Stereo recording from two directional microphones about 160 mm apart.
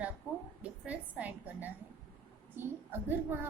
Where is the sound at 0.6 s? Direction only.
10° right (ahead or behind).